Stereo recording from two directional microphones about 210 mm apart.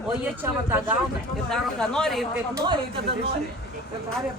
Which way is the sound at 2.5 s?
20° right (ahead or behind).